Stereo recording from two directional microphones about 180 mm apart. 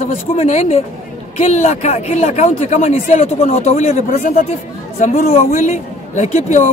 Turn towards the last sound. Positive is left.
turn(degrees=40)  # may be behind; listen again after turning